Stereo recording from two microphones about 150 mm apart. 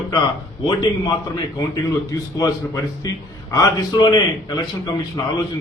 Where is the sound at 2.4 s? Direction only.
20° left (ahead or behind).